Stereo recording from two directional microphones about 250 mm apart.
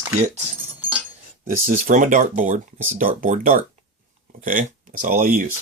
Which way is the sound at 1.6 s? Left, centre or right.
Right.